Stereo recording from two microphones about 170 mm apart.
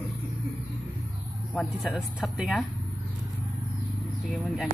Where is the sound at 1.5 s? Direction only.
5° left (ahead or behind).